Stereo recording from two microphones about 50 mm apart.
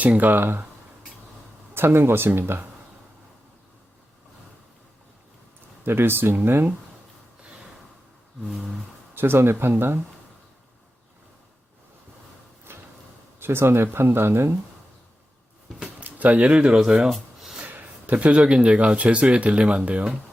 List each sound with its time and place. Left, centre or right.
0.0 s speech: right
1.7 s speech: right
5.8 s speech: right
8.4 s a sound: centre
9.1 s speech: right
12.7 s a sound: right
13.4 s speech: right
16.0 s speech: right; by 17.1 s centre
17.1 s a sound: centre
17.6 s speech: right